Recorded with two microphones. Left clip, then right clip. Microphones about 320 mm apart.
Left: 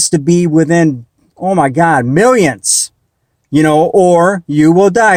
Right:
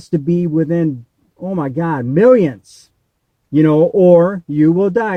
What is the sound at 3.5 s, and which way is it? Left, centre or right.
Speech, centre.